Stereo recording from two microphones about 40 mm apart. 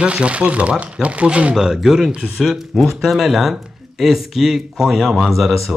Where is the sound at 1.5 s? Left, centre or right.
Centre.